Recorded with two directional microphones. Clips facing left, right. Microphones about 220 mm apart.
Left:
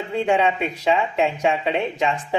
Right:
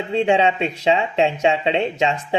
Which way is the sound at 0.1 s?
25° right (ahead or behind).